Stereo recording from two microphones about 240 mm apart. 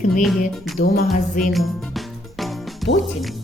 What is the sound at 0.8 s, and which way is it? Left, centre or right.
Music, left.